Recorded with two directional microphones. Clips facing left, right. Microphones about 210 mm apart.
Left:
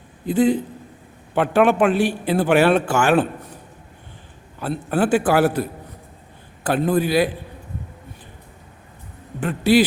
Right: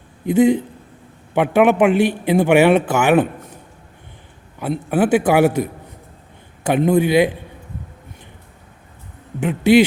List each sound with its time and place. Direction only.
0.3 s speech: 20° right (ahead or behind)
4.6 s a man's voice: 15° right (ahead or behind)